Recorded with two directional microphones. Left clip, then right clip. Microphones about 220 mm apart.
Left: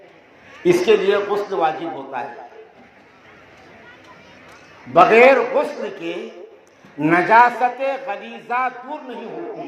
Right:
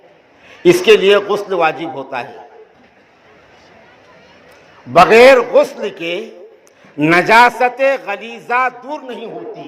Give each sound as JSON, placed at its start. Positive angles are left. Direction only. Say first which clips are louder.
{"t": 0.6, "sound": "a man's voice", "louder": "right 6 dB", "side_deg": -45}
{"t": 4.9, "sound": "a man's voice", "louder": "right 5 dB", "side_deg": -50}